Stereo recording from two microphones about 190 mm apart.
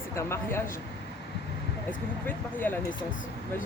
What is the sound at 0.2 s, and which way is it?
Speech, 15° left (ahead or behind).